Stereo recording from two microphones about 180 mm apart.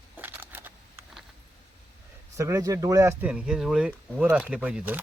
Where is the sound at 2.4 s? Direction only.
15° right (ahead or behind).